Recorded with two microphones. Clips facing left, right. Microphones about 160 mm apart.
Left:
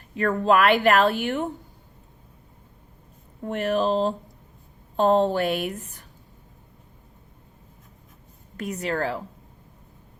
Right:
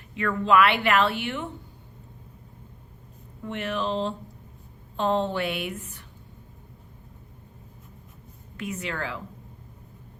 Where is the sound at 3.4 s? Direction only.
40° left (ahead or behind).